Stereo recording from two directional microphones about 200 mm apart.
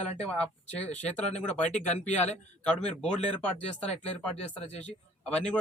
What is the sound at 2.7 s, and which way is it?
Speech, 5° left (ahead or behind).